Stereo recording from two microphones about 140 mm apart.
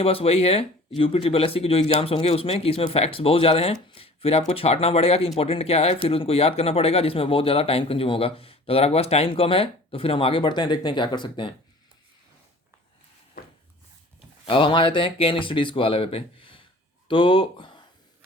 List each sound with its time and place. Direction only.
0.0 s speech: 40° left (ahead or behind)
14.4 s speech: 35° left (ahead or behind)